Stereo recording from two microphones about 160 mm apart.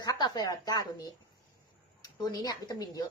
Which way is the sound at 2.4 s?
25° left (ahead or behind).